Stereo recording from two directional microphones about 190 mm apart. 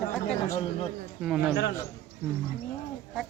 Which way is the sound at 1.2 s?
5° right (ahead or behind).